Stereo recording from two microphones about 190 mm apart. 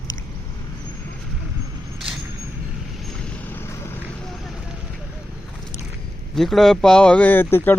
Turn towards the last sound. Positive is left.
turn(degrees=10)  # may be behind; listen again after turning